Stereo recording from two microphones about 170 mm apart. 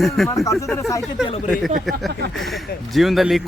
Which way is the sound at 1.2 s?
35° left (ahead or behind).